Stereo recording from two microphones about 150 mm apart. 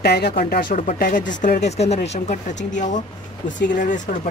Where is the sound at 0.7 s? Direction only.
60° left (ahead or behind).